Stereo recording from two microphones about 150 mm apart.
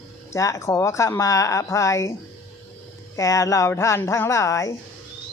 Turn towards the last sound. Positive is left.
turn(degrees=20)  # may be behind; listen again after turning